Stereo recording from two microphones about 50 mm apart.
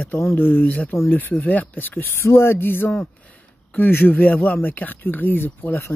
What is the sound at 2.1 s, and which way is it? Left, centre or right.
Speech, left.